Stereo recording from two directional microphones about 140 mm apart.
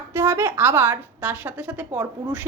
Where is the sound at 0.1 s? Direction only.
15° right (ahead or behind).